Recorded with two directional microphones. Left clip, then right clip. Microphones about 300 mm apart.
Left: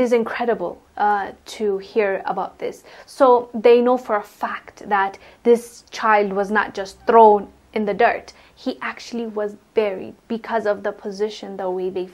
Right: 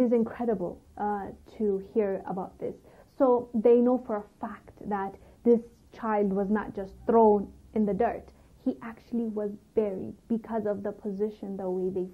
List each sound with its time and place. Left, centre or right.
0.0 s a woman's voice: centre
3.3 s a woman's voice: left
3.6 s a woman's voice: centre